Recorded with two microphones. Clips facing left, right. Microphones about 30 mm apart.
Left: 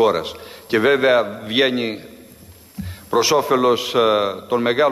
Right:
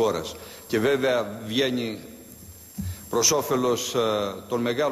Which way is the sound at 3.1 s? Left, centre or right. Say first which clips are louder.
Left 7 dB; left.